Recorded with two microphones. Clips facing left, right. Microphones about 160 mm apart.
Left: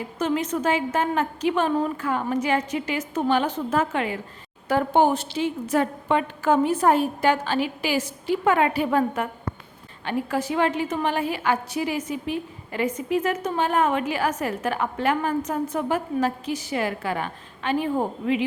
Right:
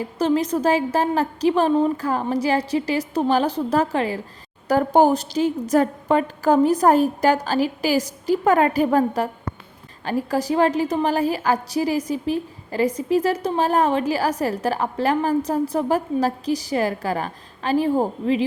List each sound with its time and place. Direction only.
0.2 s a woman's voice: 35° right (ahead or behind)